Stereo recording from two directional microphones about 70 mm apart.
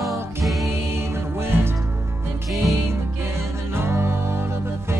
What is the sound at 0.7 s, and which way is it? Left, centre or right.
Music, right.